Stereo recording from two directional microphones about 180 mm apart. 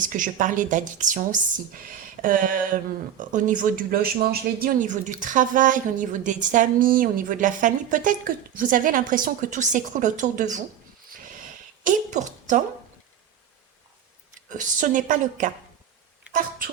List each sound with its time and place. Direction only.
0.0 s speech: 45° right (ahead or behind)
11.9 s speech: 45° right (ahead or behind)
14.5 s speech: 45° right (ahead or behind)
16.3 s a sound: 5° right (ahead or behind)